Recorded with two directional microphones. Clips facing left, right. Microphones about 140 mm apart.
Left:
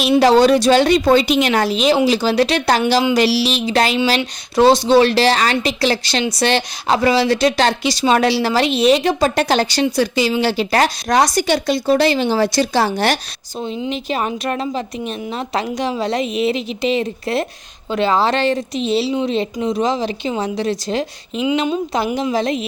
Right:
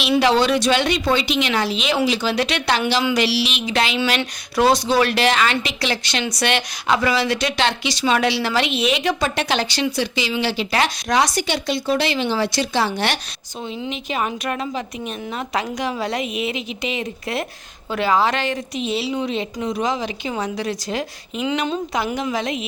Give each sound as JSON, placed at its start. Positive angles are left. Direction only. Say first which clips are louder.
{"t": 0.2, "sound": "a woman's voice", "louder": "left 7 dB", "side_deg": 40}